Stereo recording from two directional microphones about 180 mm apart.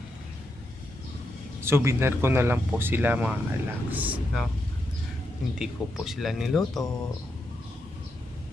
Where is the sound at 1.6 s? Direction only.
15° right (ahead or behind).